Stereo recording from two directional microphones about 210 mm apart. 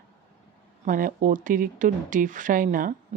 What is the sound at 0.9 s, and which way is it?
Speech, 40° right (ahead or behind).